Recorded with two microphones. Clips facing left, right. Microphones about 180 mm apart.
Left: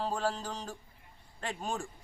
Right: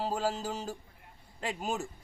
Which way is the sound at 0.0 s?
5° right (ahead or behind).